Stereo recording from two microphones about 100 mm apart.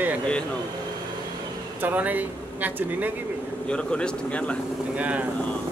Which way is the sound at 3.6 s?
10° left (ahead or behind).